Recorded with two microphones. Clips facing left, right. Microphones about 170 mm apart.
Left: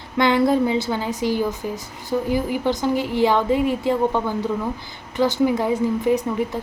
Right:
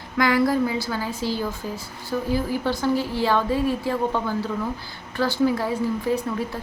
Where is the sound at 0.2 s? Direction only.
25° left (ahead or behind).